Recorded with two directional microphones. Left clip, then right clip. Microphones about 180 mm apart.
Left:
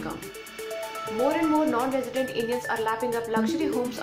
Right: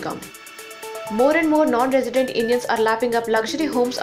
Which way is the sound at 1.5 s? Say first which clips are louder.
Right 7 dB; 25° right (ahead or behind).